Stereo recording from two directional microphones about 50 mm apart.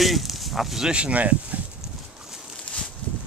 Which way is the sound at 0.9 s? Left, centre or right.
Right.